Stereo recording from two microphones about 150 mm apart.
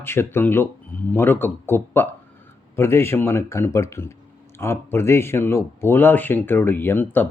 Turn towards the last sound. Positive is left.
turn(degrees=10)  # may be behind; listen again after turning